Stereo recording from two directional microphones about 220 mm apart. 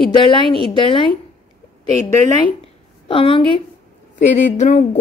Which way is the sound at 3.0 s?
25° left (ahead or behind).